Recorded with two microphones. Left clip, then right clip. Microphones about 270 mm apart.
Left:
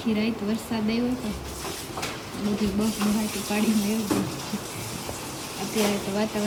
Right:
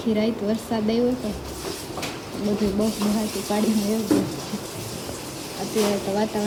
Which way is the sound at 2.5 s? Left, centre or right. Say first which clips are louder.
Right 3 dB; centre.